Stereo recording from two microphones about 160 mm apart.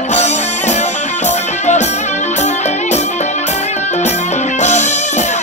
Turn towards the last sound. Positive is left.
turn(degrees=45)  # may be behind; listen again after turning